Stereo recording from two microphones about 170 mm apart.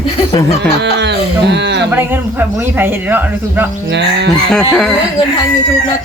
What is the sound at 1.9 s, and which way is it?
Speech, 10° right (ahead or behind).